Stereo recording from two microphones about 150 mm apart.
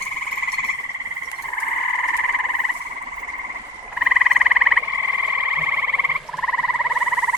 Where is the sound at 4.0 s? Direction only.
5° right (ahead or behind).